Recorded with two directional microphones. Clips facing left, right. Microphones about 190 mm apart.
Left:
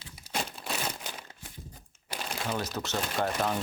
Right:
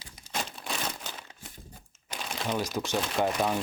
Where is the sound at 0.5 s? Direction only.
5° left (ahead or behind).